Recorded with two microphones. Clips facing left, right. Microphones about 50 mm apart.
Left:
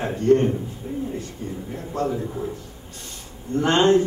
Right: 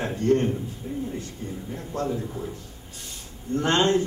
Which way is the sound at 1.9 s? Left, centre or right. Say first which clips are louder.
Left 3 dB; centre.